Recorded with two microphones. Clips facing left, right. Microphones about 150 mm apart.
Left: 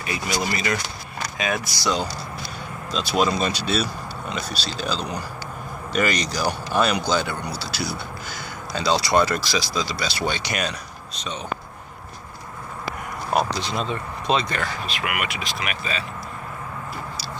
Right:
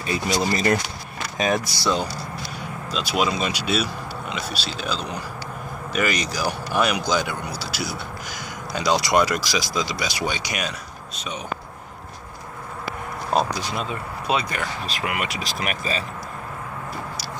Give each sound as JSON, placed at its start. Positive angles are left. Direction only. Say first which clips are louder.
{"t": 0.0, "sound": "speech", "louder": "right 3 dB", "side_deg": -30}
{"t": 2.9, "sound": "speech", "louder": "left 2 dB", "side_deg": -10}
{"t": 3.8, "sound": "a sound", "louder": "even", "side_deg": -5}
{"t": 4.5, "sound": "speech", "louder": "even", "side_deg": 35}
{"t": 4.8, "sound": "speech", "louder": "left 2 dB", "side_deg": -5}
{"t": 13.5, "sound": "speech", "louder": "left 1 dB", "side_deg": -10}
{"t": 14.9, "sound": "speech", "louder": "even", "side_deg": -35}